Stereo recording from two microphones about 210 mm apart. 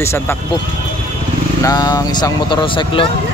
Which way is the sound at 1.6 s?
20° left (ahead or behind).